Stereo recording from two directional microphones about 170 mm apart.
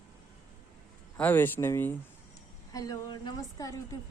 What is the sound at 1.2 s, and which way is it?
A woman's voice, 10° left (ahead or behind).